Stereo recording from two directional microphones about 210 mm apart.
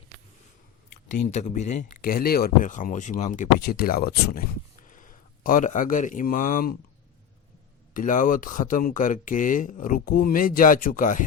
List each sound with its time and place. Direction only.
1.1 s a man's voice: 35° left (ahead or behind)
7.9 s speech: 40° left (ahead or behind)